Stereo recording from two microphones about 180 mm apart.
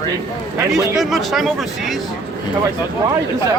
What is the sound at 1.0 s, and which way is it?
Speech, centre (ahead or behind).